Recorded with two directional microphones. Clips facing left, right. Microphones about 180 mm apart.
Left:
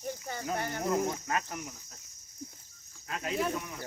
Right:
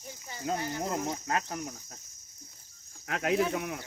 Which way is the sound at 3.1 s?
75° right (ahead or behind).